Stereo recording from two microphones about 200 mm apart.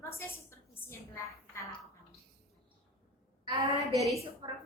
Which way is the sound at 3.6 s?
15° right (ahead or behind).